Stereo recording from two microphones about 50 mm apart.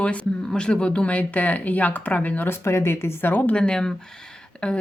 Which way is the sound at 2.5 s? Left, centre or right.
Left.